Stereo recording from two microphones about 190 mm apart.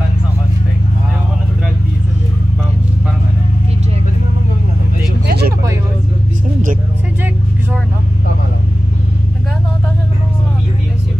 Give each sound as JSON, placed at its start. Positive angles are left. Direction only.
{"t": 5.2, "sound": "vehicle", "side_deg": -55}